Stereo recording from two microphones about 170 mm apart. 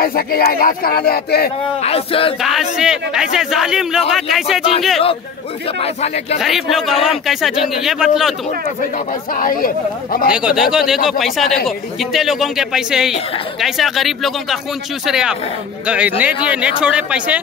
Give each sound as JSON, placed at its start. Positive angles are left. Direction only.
{"t": 0.0, "sound": "speech", "side_deg": 60}
{"t": 1.8, "sound": "speech", "side_deg": 35}
{"t": 2.4, "sound": "speech", "side_deg": -5}
{"t": 5.8, "sound": "speech", "side_deg": 40}
{"t": 6.4, "sound": "speech", "side_deg": 0}
{"t": 8.9, "sound": "speech", "side_deg": 55}
{"t": 10.2, "sound": "speech", "side_deg": -5}